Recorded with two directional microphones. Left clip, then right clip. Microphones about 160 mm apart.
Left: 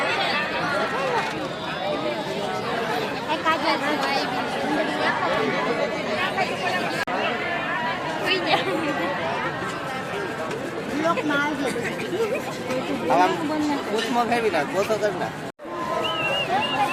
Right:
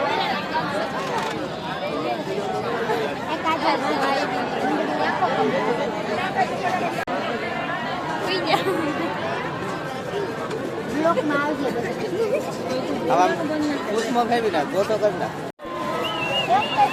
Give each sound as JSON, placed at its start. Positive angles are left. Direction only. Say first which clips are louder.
{"t": 8.3, "sound": "chatter", "louder": "even", "side_deg": -40}
{"t": 13.1, "sound": "speech", "louder": "right 1 dB", "side_deg": 0}